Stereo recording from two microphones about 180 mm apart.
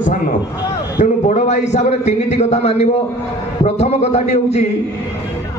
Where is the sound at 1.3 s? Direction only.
40° left (ahead or behind).